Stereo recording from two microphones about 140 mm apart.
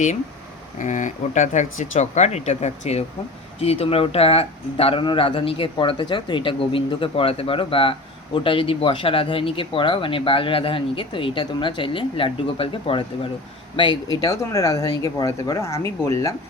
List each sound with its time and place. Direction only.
0.8 s speech: 60° left (ahead or behind); by 15.9 s 20° left (ahead or behind)